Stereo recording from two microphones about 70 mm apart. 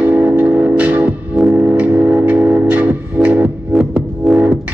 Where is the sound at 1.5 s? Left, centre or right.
Right.